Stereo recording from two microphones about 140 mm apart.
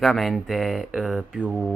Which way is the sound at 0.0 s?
Centre (ahead or behind).